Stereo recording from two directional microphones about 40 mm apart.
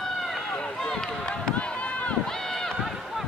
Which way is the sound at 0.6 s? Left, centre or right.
Centre.